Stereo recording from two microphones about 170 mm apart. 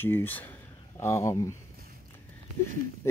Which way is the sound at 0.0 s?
10° left (ahead or behind).